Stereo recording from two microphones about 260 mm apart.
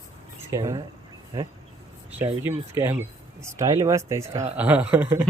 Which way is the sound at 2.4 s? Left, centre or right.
Centre.